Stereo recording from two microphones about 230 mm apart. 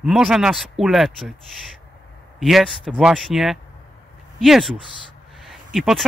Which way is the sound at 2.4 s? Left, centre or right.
Centre.